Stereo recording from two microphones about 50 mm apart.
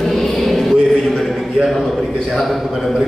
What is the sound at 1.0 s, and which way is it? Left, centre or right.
A man's voice, centre.